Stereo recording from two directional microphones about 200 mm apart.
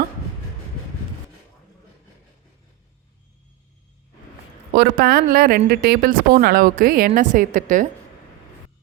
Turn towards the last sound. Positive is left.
turn(degrees=-40)  # may be behind; listen again after turning